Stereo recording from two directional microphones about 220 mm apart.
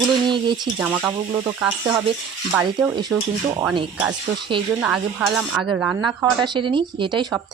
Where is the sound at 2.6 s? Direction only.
5° right (ahead or behind).